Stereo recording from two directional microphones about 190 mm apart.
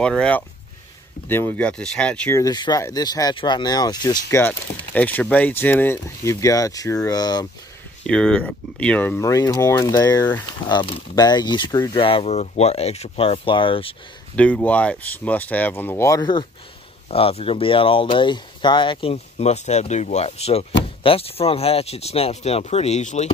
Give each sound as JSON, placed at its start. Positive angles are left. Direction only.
{"t": 0.0, "sound": "speech", "side_deg": 5}
{"t": 8.1, "sound": "speech", "side_deg": 5}
{"t": 14.3, "sound": "speech", "side_deg": 5}